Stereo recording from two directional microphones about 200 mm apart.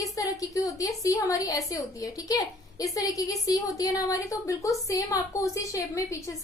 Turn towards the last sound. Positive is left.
turn(degrees=15)  # may be behind; listen again after turning